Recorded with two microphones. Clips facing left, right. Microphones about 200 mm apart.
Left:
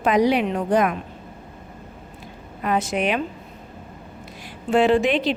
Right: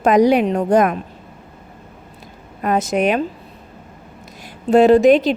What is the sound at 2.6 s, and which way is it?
Speech, 45° right (ahead or behind).